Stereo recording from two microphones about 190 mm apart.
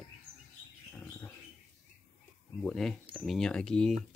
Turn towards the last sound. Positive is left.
turn(degrees=5)  # may be behind; listen again after turning